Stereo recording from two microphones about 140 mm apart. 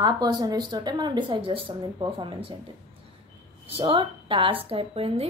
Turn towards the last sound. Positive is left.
turn(degrees=-45)  # may be behind; listen again after turning